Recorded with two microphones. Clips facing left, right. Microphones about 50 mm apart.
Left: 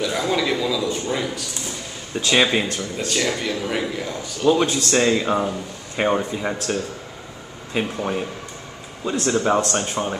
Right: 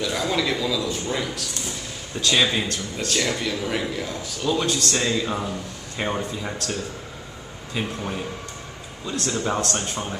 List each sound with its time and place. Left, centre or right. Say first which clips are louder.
0.0 s a man's voice: left 2 dB; centre
2.1 s speech: left 3 dB; left
3.1 s a man's voice: left 1 dB; centre
4.9 s speech: left 6 dB; left